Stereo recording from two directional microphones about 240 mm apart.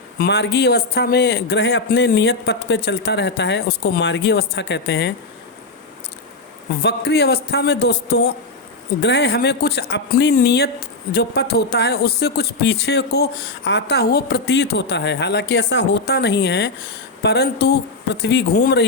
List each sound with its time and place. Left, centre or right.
0.2 s speech: left
6.8 s speech: left